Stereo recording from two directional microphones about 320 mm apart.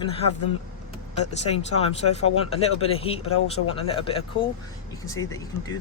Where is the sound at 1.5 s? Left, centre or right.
Centre.